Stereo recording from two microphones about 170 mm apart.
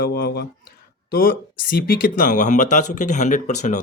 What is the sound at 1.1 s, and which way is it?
Speech, 55° left (ahead or behind).